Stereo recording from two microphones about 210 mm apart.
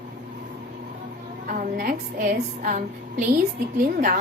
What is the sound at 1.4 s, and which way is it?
A woman's voice, 40° right (ahead or behind).